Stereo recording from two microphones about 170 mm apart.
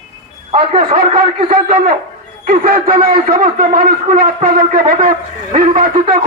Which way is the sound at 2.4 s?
60° right (ahead or behind).